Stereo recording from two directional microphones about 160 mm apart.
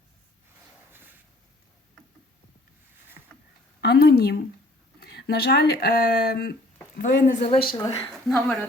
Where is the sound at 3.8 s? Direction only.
85° left.